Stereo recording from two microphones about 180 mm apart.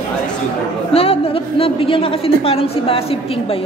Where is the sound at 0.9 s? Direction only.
30° left (ahead or behind).